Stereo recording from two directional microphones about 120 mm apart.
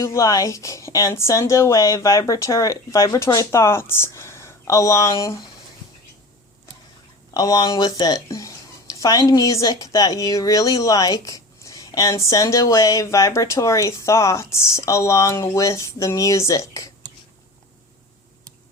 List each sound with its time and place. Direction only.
0.0 s speech: 25° left (ahead or behind)
7.3 s speech: 30° left (ahead or behind)